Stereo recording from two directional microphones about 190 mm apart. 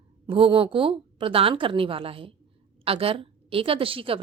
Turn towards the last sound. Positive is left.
turn(degrees=-30)  # may be behind; listen again after turning